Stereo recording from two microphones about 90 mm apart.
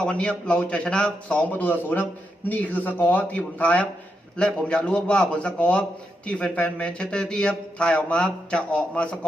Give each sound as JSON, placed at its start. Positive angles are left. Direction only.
{"t": 0.0, "sound": "a man's voice", "side_deg": 10}